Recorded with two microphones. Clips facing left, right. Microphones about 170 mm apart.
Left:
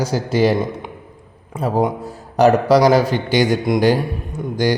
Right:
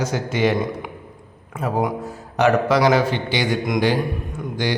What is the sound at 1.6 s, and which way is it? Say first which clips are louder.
A man's voice: left 4 dB; 30° left (ahead or behind).